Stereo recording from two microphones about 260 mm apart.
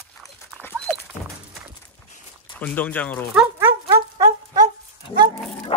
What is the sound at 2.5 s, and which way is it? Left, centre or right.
Speech, centre.